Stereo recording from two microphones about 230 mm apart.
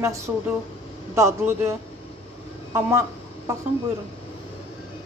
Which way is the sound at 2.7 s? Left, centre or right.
Centre.